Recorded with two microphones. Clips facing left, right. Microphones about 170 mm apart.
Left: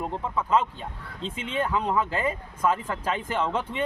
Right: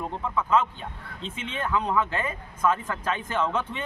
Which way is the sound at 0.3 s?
30° left (ahead or behind).